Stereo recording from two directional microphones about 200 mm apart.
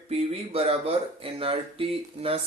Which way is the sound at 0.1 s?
30° right (ahead or behind).